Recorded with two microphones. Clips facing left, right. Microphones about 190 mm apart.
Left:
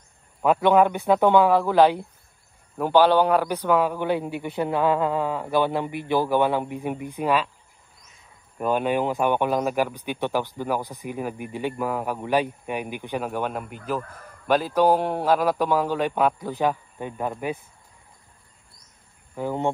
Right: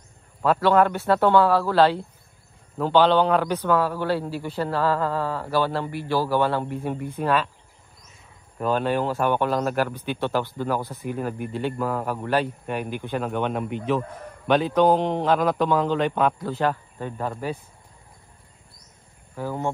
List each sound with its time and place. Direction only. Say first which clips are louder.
0.4 s a man's voice: left 1 dB; 15° left (ahead or behind)
8.5 s a man's voice: even; 15° left (ahead or behind)
19.3 s speech: left 2 dB; 20° left (ahead or behind)